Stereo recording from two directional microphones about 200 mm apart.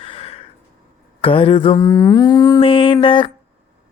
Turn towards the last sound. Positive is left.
turn(degrees=25)  # may be behind; listen again after turning